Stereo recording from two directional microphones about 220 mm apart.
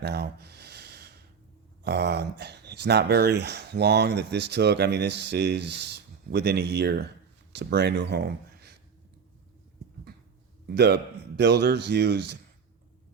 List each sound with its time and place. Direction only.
0.0 s a sound: 50° right (ahead or behind)
1.8 s speech: 50° right (ahead or behind)
10.7 s speech: 50° right (ahead or behind)